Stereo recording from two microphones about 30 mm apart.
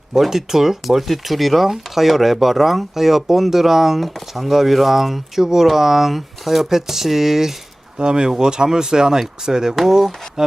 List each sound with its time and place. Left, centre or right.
0.3 s speech: centre
7.9 s speech: right
9.7 s speech: centre
10.4 s speech: centre